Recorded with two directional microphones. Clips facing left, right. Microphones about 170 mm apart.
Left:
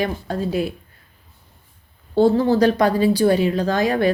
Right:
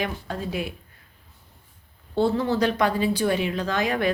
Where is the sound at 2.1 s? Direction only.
40° left (ahead or behind).